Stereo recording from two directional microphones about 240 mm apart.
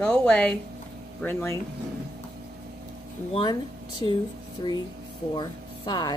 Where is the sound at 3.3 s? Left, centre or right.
Centre.